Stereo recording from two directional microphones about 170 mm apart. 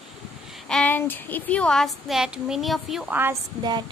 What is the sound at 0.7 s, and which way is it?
Speech, 10° left (ahead or behind).